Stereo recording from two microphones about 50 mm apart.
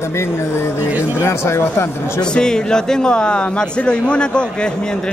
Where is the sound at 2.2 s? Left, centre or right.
Centre.